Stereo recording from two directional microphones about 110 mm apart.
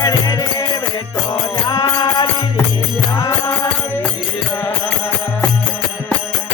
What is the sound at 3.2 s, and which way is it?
Music, 25° left (ahead or behind).